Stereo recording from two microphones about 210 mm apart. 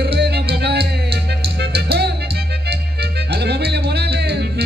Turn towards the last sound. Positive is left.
turn(degrees=-50)  # may be behind; listen again after turning